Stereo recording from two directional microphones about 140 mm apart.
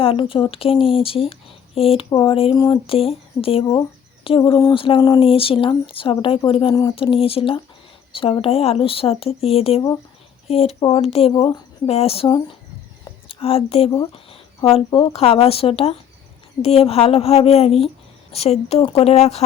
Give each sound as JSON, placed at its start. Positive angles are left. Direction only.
{"t": 0.0, "sound": "speech", "side_deg": 40}
{"t": 2.6, "sound": "speech", "side_deg": 30}
{"t": 2.8, "sound": "a woman's voice", "side_deg": 45}
{"t": 10.8, "sound": "speech", "side_deg": 35}
{"t": 11.0, "sound": "a woman's voice", "side_deg": 45}